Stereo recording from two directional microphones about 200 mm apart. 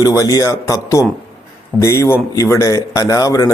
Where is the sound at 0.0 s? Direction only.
20° left (ahead or behind).